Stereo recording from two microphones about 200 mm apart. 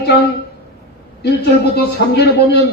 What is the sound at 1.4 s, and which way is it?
A man's voice, 55° left (ahead or behind).